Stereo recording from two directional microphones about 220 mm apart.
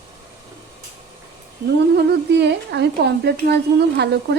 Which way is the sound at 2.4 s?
50° right (ahead or behind).